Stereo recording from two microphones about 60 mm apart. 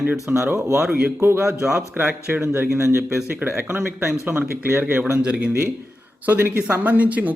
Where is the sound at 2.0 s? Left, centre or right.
Right.